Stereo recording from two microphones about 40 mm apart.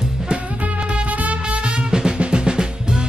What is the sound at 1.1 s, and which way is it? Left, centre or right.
Music, right.